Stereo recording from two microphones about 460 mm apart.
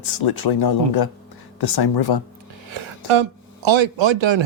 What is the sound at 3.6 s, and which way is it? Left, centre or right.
Speech, right.